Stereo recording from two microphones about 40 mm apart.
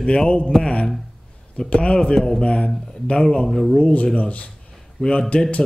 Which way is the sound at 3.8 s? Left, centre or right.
Left.